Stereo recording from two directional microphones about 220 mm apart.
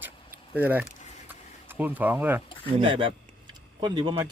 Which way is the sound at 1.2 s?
10° right (ahead or behind).